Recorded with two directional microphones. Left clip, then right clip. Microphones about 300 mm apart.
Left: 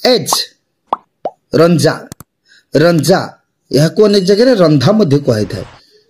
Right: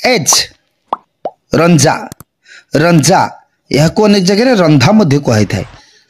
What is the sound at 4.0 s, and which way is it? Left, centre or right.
Speech, right.